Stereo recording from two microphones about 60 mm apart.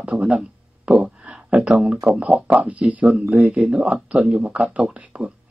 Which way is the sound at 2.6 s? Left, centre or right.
Right.